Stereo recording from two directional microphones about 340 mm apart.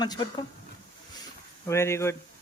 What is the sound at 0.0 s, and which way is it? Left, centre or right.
Speech, centre.